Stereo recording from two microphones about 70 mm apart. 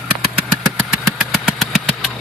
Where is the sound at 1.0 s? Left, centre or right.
Centre.